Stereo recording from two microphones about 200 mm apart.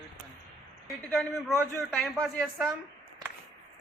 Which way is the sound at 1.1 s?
Centre (ahead or behind).